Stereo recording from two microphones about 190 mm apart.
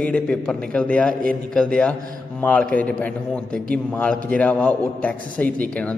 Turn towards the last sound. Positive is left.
turn(degrees=5)  # may be behind; listen again after turning